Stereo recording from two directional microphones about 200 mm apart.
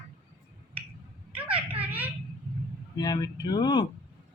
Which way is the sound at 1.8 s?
10° right (ahead or behind).